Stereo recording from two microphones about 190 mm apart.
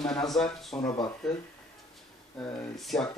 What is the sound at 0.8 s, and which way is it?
Speech, 20° left (ahead or behind).